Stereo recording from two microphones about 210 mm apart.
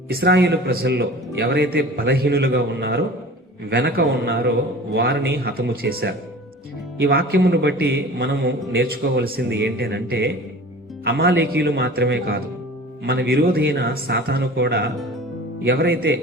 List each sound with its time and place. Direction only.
0.1 s a man's voice: 50° right (ahead or behind)